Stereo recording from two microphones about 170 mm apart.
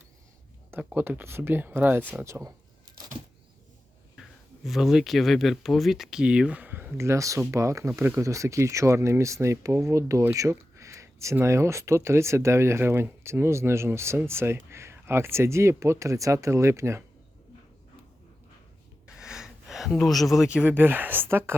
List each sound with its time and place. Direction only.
0.9 s speech: 10° right (ahead or behind)
4.2 s speech: centre (ahead or behind); by 17.0 s 15° right (ahead or behind)
19.0 s speech: 5° right (ahead or behind)